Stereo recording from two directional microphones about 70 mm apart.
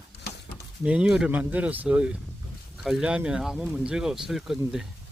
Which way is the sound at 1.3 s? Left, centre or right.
Right.